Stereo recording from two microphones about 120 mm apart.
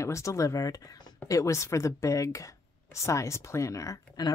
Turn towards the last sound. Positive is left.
turn(degrees=30)  # may be behind; listen again after turning